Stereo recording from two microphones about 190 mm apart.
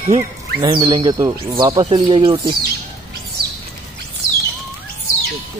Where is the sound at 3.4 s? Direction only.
25° right (ahead or behind).